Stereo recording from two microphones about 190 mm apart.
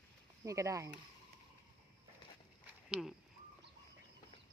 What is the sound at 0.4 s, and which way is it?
Speech, 15° right (ahead or behind).